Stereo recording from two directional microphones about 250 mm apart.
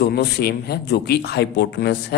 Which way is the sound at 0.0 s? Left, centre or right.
Left.